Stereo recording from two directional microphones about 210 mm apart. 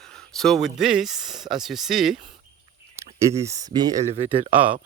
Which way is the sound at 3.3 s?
15° right (ahead or behind).